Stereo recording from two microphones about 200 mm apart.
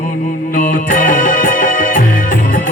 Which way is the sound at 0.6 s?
40° left (ahead or behind).